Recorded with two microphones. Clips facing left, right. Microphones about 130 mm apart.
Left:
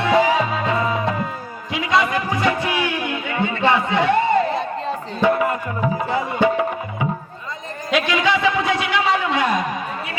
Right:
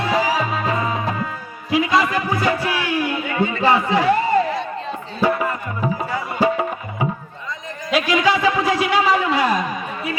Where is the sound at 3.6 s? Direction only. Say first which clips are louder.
Right 1 dB; 35° right (ahead or behind).